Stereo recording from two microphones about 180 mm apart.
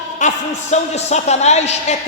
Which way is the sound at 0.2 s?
40° left (ahead or behind).